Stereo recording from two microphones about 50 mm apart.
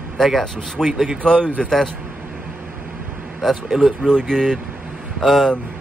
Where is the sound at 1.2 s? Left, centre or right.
Centre.